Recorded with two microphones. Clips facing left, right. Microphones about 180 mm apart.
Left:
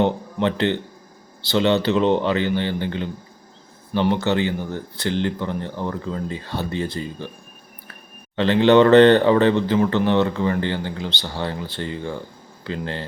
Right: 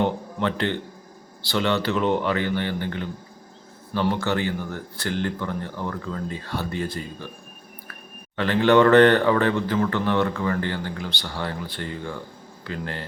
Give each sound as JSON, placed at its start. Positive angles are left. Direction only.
{"t": 0.0, "sound": "a man's voice", "side_deg": 25}
{"t": 8.4, "sound": "speech", "side_deg": 25}